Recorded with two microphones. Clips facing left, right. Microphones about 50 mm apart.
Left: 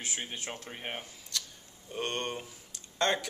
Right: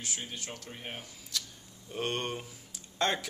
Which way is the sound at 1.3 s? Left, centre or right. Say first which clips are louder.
Even; centre.